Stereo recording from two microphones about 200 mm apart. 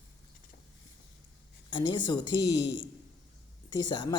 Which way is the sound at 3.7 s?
20° left (ahead or behind).